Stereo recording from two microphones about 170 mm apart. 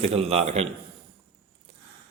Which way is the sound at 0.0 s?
35° right (ahead or behind).